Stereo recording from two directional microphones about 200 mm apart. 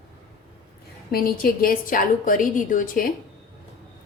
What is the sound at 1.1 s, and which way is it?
A woman's voice, 45° left (ahead or behind).